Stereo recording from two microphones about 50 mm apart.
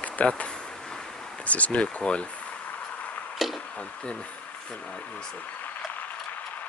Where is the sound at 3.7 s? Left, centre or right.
Left.